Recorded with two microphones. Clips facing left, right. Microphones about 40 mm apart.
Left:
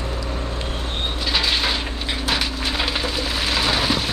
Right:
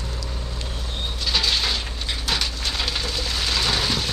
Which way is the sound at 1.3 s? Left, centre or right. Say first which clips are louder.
Left 1 dB; centre.